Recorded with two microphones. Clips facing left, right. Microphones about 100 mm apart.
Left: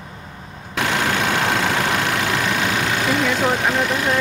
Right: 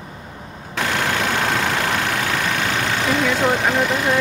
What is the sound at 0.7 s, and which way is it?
Vehicle, 5° left (ahead or behind).